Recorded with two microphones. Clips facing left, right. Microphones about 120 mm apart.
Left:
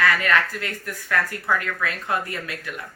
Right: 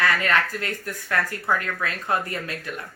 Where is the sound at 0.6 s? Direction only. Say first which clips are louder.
Right 1 dB; 30° right (ahead or behind).